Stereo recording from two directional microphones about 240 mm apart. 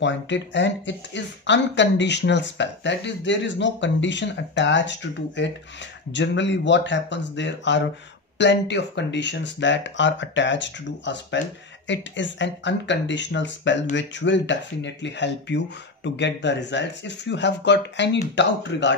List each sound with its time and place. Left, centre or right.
0.0 s speech: left